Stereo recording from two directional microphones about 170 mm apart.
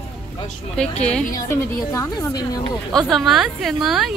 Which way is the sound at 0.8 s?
5° left (ahead or behind).